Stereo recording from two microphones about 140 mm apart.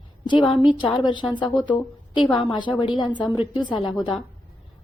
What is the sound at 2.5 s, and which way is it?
A woman's voice, 35° left (ahead or behind).